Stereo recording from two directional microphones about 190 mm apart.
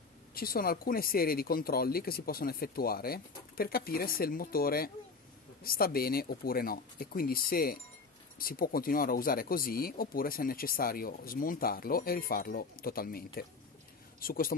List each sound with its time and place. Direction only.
0.3 s speech: 50° left (ahead or behind)